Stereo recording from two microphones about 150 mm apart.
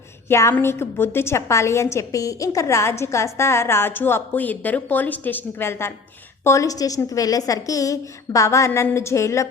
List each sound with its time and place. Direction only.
0.3 s a woman's voice: 20° left (ahead or behind)